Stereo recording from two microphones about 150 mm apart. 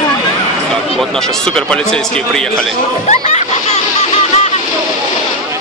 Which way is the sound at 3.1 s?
50° left (ahead or behind).